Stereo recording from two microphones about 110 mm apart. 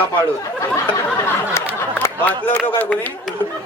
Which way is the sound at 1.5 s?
20° left (ahead or behind).